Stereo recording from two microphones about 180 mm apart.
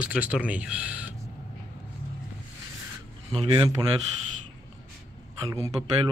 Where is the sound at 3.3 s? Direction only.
30° right (ahead or behind).